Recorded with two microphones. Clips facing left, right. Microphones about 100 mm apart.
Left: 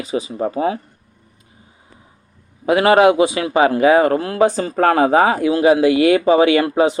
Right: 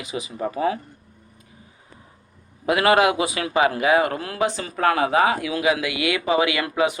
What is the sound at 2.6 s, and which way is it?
A man's voice, 30° left (ahead or behind).